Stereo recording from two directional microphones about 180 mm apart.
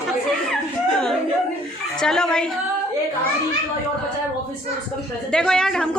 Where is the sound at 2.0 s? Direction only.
5° left (ahead or behind).